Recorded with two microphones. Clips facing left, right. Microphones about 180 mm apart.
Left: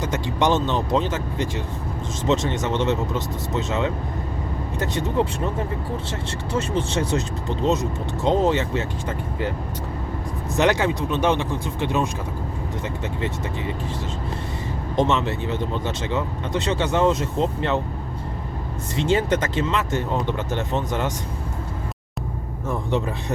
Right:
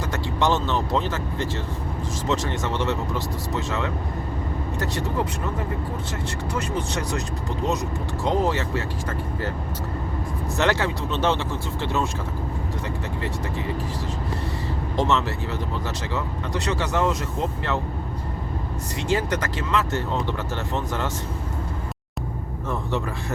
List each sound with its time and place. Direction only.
0.0 s speech: 20° left (ahead or behind)
6.5 s speech: 25° left (ahead or behind)
10.6 s speech: 15° left (ahead or behind)
14.9 s speech: 20° left (ahead or behind)
18.9 s speech: 25° left (ahead or behind)
22.7 s speech: 20° left (ahead or behind)